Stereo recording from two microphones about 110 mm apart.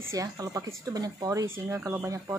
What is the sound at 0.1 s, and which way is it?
Speech, 30° right (ahead or behind).